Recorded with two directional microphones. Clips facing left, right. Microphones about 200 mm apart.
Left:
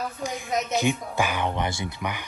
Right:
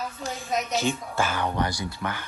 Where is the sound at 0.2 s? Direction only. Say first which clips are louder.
Left 1 dB; 15° left (ahead or behind).